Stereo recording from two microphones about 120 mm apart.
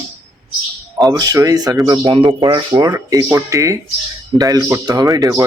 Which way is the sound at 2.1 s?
40° right (ahead or behind).